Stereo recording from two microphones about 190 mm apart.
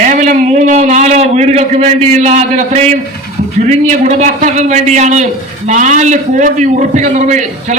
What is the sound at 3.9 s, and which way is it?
A man's voice, 40° right (ahead or behind).